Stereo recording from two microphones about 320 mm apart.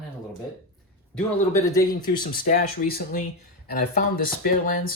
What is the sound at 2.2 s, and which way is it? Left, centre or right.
Speech, left.